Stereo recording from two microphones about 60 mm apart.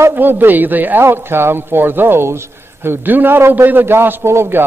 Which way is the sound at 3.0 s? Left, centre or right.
Right.